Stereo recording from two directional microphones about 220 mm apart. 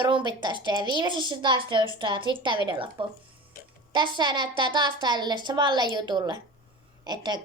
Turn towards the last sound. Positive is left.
turn(degrees=-20)  # may be behind; listen again after turning